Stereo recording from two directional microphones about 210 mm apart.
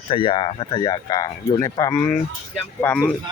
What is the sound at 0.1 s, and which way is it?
Speech, 25° left (ahead or behind).